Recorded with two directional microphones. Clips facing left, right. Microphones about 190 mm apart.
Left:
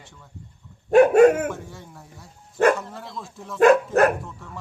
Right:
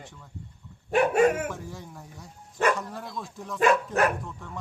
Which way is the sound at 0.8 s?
45° left (ahead or behind).